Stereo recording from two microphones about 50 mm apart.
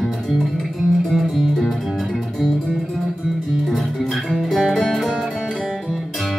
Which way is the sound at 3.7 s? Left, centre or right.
Centre.